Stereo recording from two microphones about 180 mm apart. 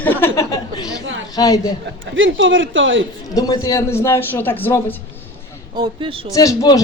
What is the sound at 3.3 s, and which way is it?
A man's voice, 20° left (ahead or behind).